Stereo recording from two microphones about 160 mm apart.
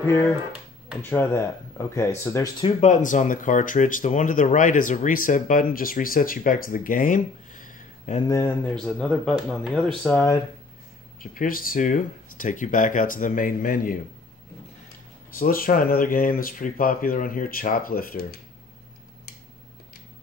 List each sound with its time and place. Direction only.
0.0 s speech: 15° left (ahead or behind)
2.6 s speech: 45° left (ahead or behind)
8.6 s speech: 5° left (ahead or behind)
11.3 s speech: 60° left (ahead or behind)
15.3 s speech: 65° left (ahead or behind)